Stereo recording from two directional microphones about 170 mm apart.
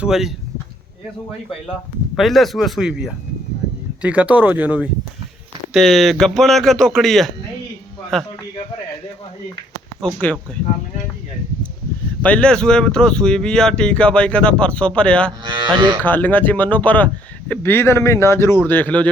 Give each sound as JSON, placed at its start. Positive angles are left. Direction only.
{"t": 0.0, "sound": "speech", "side_deg": 0}
{"t": 2.1, "sound": "speech", "side_deg": 0}
{"t": 10.2, "sound": "a man's voice", "side_deg": 10}
{"t": 12.2, "sound": "speech", "side_deg": 5}
{"t": 15.4, "sound": "cattle", "side_deg": -25}
{"t": 16.0, "sound": "a man's voice", "side_deg": 10}